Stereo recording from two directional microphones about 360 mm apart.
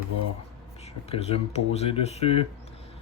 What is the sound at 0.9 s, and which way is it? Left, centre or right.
Speech, centre.